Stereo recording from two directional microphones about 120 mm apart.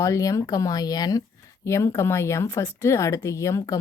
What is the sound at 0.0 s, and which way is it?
Speech, 25° left (ahead or behind).